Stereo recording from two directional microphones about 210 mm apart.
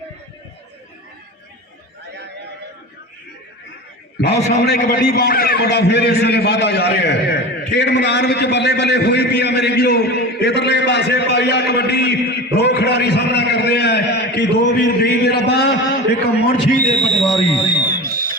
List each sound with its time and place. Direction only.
4.4 s a man's voice: 30° left (ahead or behind)
4.6 s a man's voice: 50° left (ahead or behind)
17.2 s speech: centre (ahead or behind)
17.9 s music: 45° right (ahead or behind)